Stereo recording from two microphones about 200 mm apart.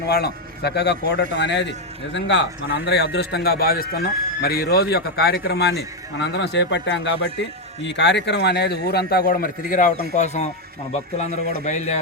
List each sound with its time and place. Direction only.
0.0 s a man's voice: 55° left (ahead or behind); by 11.9 s 35° left (ahead or behind)